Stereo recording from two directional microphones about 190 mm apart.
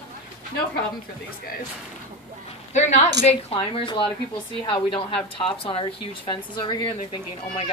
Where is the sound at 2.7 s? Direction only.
40° left (ahead or behind).